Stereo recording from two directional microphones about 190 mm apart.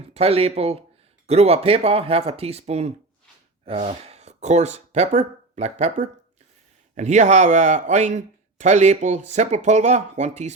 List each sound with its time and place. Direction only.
0.1 s speech: 30° right (ahead or behind)